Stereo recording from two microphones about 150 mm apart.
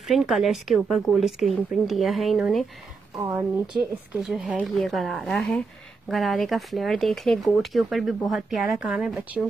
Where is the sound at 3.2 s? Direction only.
15° right (ahead or behind).